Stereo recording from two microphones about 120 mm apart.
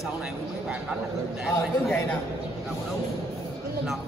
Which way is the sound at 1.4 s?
Centre (ahead or behind).